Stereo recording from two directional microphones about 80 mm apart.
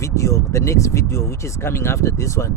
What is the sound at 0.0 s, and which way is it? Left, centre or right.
Speech, left.